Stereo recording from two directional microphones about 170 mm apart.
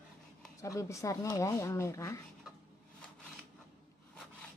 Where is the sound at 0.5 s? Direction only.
20° left (ahead or behind).